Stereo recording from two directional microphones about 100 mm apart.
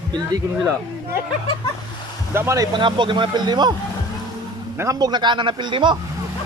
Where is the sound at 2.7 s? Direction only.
55° right (ahead or behind).